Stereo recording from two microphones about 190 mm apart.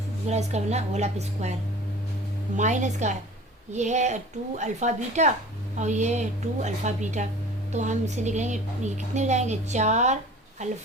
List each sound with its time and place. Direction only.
0.3 s a woman's voice: 35° right (ahead or behind)
2.6 s a woman's voice: 40° right (ahead or behind)